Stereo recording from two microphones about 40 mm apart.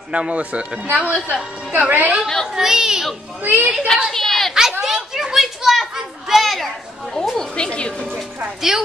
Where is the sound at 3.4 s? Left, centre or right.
Right.